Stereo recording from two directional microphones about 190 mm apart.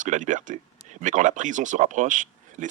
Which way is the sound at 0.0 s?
40° right (ahead or behind).